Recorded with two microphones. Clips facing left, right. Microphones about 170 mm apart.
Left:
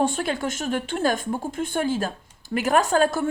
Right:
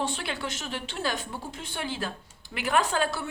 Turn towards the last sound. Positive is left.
turn(degrees=45)  # may be behind; listen again after turning